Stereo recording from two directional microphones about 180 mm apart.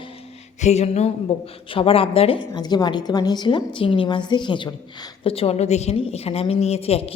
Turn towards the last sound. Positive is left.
turn(degrees=35)  # may be behind; listen again after turning